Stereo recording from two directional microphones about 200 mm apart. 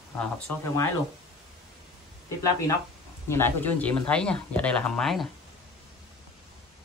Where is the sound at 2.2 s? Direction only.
15° left (ahead or behind).